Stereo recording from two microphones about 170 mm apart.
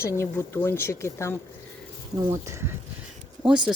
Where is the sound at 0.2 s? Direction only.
15° left (ahead or behind).